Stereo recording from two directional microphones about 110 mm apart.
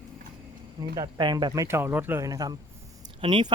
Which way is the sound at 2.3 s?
35° right (ahead or behind).